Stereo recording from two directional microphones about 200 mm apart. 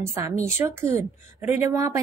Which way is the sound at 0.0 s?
15° right (ahead or behind).